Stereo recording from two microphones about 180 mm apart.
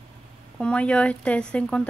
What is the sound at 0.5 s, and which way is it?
A woman's voice, 5° left (ahead or behind).